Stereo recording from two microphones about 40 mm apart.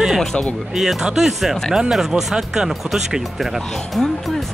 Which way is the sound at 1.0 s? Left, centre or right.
Centre.